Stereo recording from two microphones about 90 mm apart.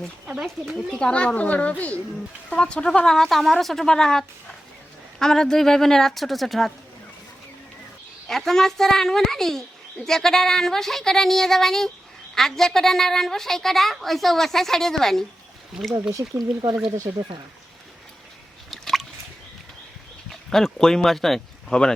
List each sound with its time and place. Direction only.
0.4 s a child's voice: centre (ahead or behind)
8.3 s a child's voice: 5° left (ahead or behind)
16.4 s speech: 55° right (ahead or behind)
18.7 s drip: centre (ahead or behind)
20.3 s speech: 5° left (ahead or behind)